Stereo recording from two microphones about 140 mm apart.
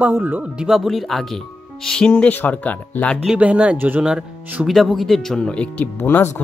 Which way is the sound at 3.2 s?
10° right (ahead or behind).